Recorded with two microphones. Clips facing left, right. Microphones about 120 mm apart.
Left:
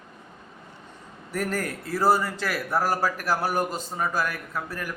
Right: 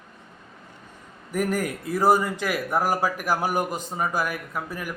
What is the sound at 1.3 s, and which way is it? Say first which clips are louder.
A man's voice: right 3 dB; 15° right (ahead or behind).